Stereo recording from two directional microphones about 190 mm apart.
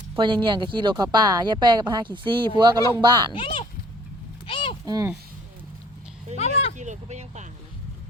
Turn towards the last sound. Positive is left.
turn(degrees=-35)  # may be behind; listen again after turning